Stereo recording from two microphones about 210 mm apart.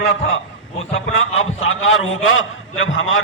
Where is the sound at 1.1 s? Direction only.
70° left (ahead or behind).